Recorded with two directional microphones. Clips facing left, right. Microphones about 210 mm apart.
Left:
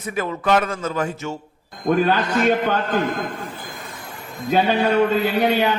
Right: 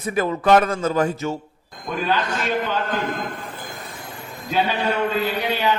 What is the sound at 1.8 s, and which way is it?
Speech, 50° left (ahead or behind).